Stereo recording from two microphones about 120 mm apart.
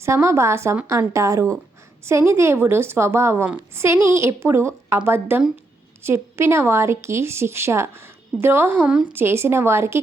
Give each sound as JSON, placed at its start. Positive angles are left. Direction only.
{"t": 0.0, "sound": "speech", "side_deg": -25}
{"t": 9.1, "sound": "speech", "side_deg": -20}